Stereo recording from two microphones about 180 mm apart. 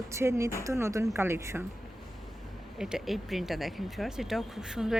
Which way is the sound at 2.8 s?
5° right (ahead or behind).